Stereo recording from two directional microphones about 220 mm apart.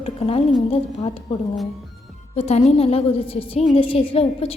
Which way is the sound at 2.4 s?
30° left (ahead or behind).